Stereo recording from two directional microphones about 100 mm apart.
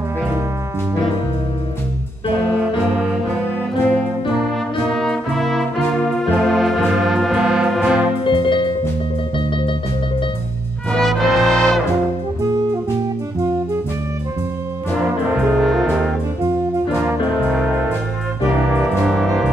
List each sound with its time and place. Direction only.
2.3 s music: 15° right (ahead or behind)
4.8 s brass instrument: 5° left (ahead or behind)
6.3 s music: centre (ahead or behind)
8.2 s music: 60° left (ahead or behind)
10.9 s brass instrument: centre (ahead or behind)
15.2 s brass instrument: 10° right (ahead or behind)
17.4 s brass instrument: 10° right (ahead or behind)
18.4 s music: 10° right (ahead or behind)